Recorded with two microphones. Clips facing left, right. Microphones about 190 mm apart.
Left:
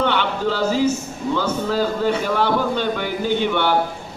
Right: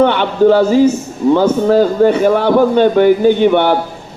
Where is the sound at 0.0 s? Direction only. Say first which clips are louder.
Right 10 dB; 55° right (ahead or behind).